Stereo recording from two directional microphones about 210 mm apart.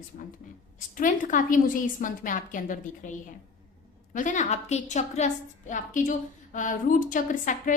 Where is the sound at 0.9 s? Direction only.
40° left (ahead or behind).